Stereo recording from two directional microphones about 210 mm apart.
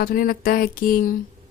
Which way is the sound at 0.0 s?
45° left (ahead or behind).